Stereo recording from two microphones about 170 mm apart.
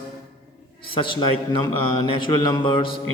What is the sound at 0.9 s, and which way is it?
Speech, 30° left (ahead or behind).